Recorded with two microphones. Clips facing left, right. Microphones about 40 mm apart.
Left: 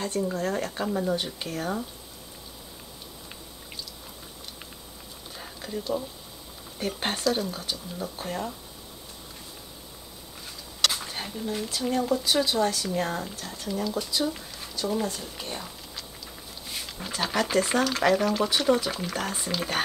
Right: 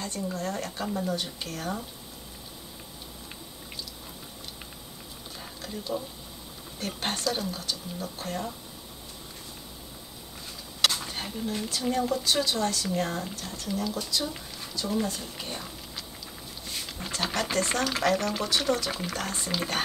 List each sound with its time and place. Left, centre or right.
0.0 s a woman's voice: centre
5.4 s a sound: centre
7.0 s speech: centre
10.9 s speech: centre
16.6 s a sound: centre
18.0 s speech: centre